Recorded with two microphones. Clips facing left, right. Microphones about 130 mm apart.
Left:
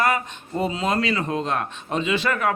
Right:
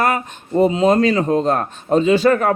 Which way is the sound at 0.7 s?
30° right (ahead or behind).